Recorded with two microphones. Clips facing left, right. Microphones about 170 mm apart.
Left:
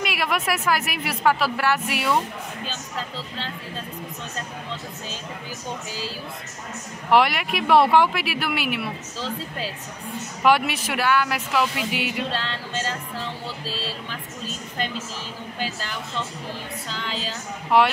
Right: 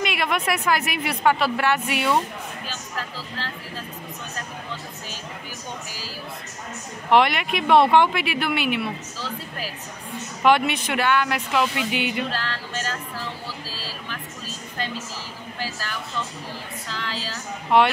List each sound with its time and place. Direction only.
0.0 s speech: 5° left (ahead or behind)
2.6 s a sound: 25° left (ahead or behind)
5.9 s a woman's voice: 25° left (ahead or behind)
7.1 s speech: 5° left (ahead or behind)
10.4 s speech: 5° left (ahead or behind)
12.3 s music: 25° left (ahead or behind)
15.6 s a woman's voice: 20° left (ahead or behind)
17.0 s a woman's voice: 25° left (ahead or behind)
17.7 s speech: 5° left (ahead or behind)